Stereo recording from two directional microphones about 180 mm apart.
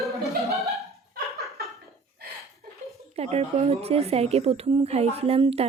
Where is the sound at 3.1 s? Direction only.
35° right (ahead or behind).